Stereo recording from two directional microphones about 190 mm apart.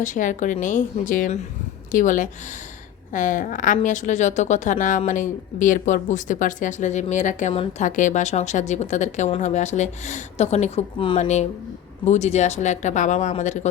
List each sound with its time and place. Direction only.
0.0 s a woman's voice: 40° left (ahead or behind); by 11.2 s 25° left (ahead or behind)
11.2 s a woman's voice: 35° left (ahead or behind)